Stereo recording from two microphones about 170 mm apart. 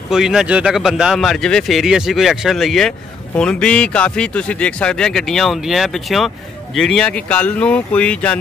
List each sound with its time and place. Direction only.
0.1 s speech: 5° right (ahead or behind)